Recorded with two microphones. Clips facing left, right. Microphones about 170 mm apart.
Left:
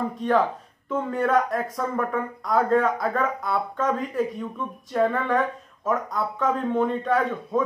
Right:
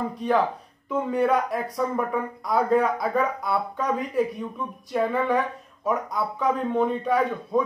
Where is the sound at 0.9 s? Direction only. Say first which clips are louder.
Even; centre (ahead or behind).